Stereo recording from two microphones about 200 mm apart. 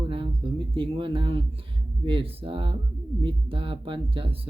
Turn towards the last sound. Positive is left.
turn(degrees=-25)  # may be behind; listen again after turning